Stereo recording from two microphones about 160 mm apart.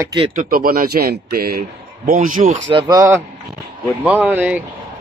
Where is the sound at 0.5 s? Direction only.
65° right (ahead or behind).